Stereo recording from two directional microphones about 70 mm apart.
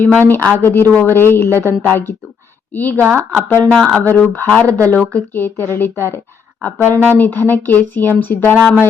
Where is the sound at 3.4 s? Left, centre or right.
Left.